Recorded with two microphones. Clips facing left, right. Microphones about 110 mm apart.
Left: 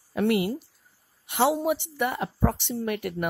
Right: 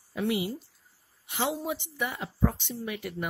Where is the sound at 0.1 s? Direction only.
60° left (ahead or behind).